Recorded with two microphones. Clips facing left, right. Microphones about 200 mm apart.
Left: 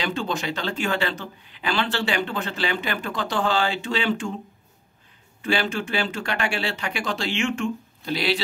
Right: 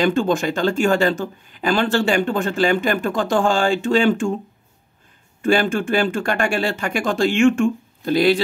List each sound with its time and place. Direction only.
0.0 s speech: 50° right (ahead or behind)
5.4 s speech: 50° right (ahead or behind)